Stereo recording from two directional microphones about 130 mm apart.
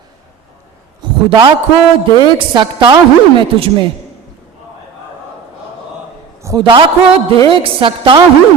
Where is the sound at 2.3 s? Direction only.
40° right (ahead or behind).